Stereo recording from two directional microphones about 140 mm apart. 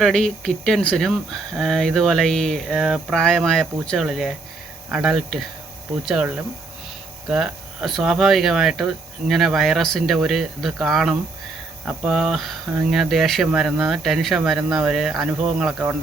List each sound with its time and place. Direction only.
0.0 s speech: 5° left (ahead or behind)